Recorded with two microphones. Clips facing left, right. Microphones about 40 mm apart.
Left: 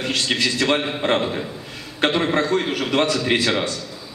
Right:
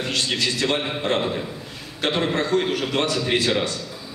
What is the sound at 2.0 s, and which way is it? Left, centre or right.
A man's voice, left.